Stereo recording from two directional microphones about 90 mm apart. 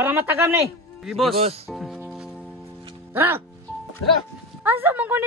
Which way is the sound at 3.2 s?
25° right (ahead or behind).